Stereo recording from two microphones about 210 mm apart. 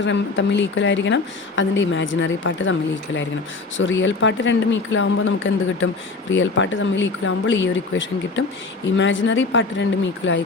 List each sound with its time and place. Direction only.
0.0 s speech: 60° left (ahead or behind)
3.8 s speech: 65° left (ahead or behind)